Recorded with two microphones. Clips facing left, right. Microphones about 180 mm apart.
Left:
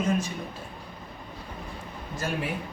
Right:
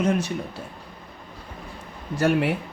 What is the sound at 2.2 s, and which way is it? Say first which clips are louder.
Speech: right 10 dB; 75° right (ahead or behind).